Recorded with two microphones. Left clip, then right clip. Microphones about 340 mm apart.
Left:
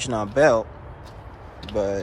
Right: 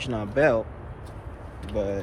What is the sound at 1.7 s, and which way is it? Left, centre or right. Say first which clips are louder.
Speech: left 4 dB; centre.